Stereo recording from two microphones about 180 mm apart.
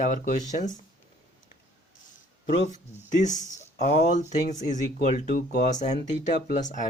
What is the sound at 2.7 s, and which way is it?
Speech, 45° left (ahead or behind).